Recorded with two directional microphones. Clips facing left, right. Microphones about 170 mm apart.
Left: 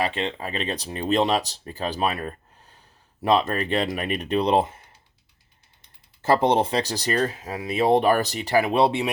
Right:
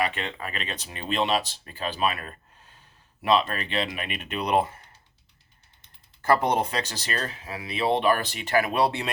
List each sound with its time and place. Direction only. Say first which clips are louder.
0.0 s speech: left 3 dB; 30° left (ahead or behind)
3.2 s speech: left 2 dB; 40° left (ahead or behind); by 4.8 s 25° left (ahead or behind)
6.2 s speech: left 3 dB; 25° left (ahead or behind)
7.4 s speech: left 1 dB; 40° left (ahead or behind)
8.6 s speech: left 4 dB; 25° left (ahead or behind)